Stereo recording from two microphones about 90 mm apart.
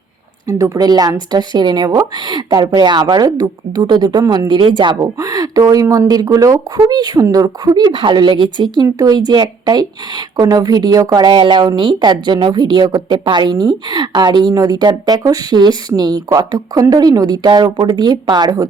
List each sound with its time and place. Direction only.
0.4 s a woman's voice: 40° right (ahead or behind); by 5.0 s 60° right (ahead or behind)
5.2 s a woman's voice: 40° right (ahead or behind)
11.3 s a woman's voice: 60° right (ahead or behind); by 18.7 s 45° right (ahead or behind)